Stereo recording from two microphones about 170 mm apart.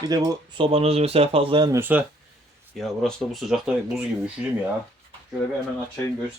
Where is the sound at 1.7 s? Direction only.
10° right (ahead or behind).